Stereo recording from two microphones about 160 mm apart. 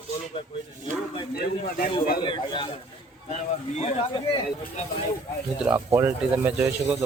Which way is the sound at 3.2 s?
45° left (ahead or behind).